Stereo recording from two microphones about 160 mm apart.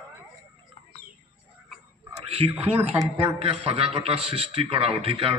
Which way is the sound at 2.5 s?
10° right (ahead or behind).